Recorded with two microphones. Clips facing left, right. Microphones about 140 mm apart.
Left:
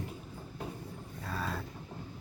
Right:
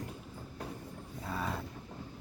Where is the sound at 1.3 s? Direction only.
20° right (ahead or behind).